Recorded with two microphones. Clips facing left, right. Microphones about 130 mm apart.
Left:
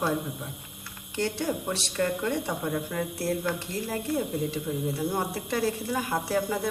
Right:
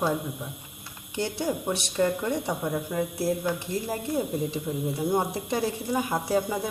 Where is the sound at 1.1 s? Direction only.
15° right (ahead or behind).